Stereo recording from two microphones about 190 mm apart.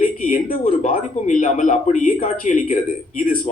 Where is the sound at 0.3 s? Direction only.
45° left (ahead or behind).